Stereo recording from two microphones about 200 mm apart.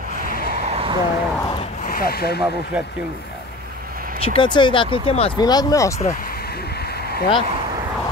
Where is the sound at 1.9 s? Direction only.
50° left (ahead or behind).